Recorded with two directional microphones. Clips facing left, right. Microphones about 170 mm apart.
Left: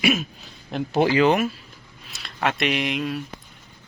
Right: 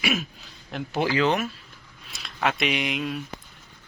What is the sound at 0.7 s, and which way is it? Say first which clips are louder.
Speech: left 5 dB; 25° left (ahead or behind).